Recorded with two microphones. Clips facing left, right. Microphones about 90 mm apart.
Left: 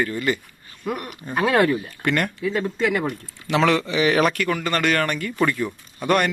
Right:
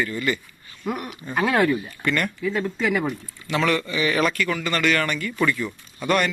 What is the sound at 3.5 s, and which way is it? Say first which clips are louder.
Speech: left 3 dB; 75° left (ahead or behind).